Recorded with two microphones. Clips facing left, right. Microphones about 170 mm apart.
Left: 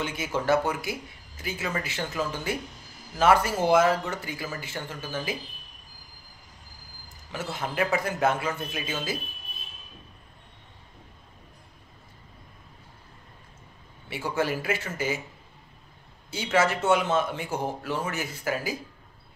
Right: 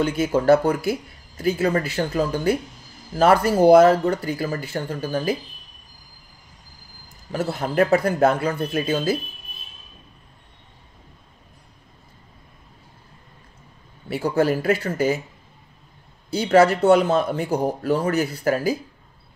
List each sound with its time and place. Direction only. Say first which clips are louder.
0.0 s speech: right 9 dB; 40° right (ahead or behind)
7.3 s speech: right 8 dB; 40° right (ahead or behind)
14.0 s speech: right 8 dB; 40° right (ahead or behind)
16.3 s speech: right 9 dB; 35° right (ahead or behind)